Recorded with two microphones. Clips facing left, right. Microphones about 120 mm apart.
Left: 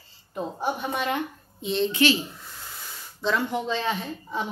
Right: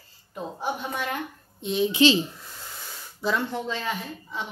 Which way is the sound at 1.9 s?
20° right (ahead or behind).